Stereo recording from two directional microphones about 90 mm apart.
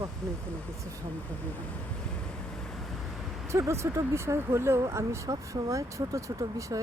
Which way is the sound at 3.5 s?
35° right (ahead or behind).